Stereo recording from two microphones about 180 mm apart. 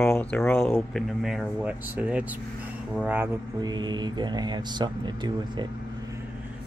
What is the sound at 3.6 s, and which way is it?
Speech, 25° right (ahead or behind).